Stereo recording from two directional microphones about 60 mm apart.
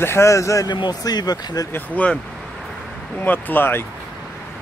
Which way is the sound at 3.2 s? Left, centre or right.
Left.